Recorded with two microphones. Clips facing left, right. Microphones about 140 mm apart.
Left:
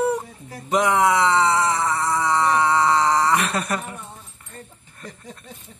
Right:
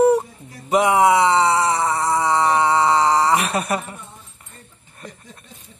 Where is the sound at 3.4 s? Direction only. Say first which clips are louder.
Right 2 dB; 15° right (ahead or behind).